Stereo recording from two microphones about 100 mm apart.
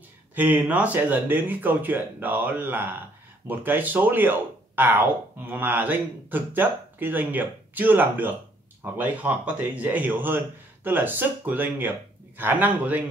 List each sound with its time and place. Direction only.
0.3 s speech: 20° right (ahead or behind)